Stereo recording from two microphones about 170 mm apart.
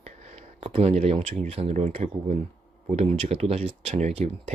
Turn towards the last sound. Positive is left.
turn(degrees=-40)  # may be behind; listen again after turning